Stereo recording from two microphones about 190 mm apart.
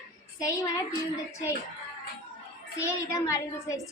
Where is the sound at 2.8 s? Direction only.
15° left (ahead or behind).